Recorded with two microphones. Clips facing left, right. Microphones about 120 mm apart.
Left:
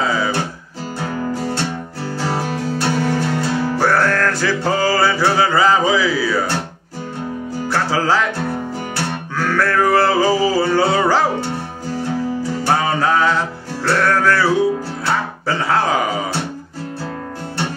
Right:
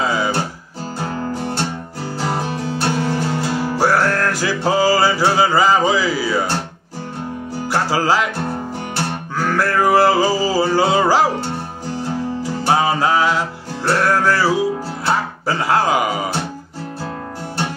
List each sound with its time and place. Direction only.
0.0 s guitar: 10° right (ahead or behind)
2.2 s music: 25° right (ahead or behind)
3.5 s music: 10° right (ahead or behind)
5.7 s a sound: 10° right (ahead or behind)
7.7 s music: 10° right (ahead or behind)
8.5 s music: 20° right (ahead or behind)
12.6 s music: 15° right (ahead or behind)
15.9 s music: 10° right (ahead or behind)